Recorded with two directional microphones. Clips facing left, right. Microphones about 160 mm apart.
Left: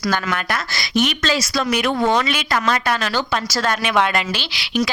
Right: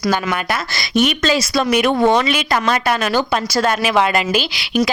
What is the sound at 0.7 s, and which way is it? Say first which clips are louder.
A woman's voice: right 3 dB; 25° right (ahead or behind).